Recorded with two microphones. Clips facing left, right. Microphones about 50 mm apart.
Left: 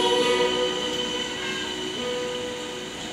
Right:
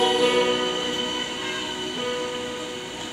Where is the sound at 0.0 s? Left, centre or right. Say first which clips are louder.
Right 1 dB; right.